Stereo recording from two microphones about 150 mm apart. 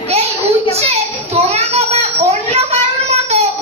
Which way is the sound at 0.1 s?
45° right (ahead or behind).